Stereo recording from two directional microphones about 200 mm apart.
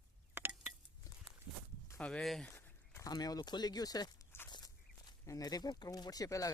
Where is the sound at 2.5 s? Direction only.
15° left (ahead or behind).